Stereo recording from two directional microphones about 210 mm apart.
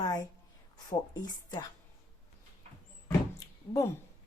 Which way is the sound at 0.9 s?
20° left (ahead or behind).